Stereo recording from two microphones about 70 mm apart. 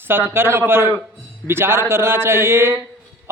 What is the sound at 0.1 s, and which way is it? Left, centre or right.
A man's voice, right.